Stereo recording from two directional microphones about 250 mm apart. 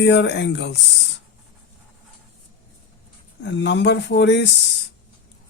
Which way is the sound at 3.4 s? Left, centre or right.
Left.